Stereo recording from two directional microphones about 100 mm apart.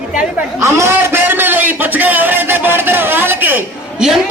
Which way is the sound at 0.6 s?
25° right (ahead or behind).